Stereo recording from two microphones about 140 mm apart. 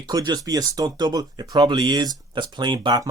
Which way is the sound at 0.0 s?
30° right (ahead or behind).